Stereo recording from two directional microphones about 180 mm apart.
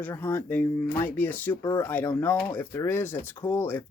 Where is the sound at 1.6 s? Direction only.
20° left (ahead or behind).